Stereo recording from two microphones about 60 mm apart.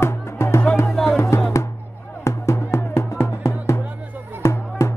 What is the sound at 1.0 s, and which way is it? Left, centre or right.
Music, centre.